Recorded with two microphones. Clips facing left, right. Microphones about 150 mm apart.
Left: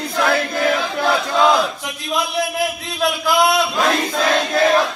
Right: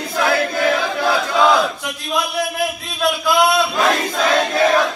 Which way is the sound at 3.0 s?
Centre (ahead or behind).